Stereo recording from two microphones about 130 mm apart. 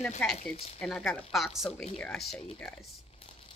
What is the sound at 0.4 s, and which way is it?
Speech, 55° left (ahead or behind).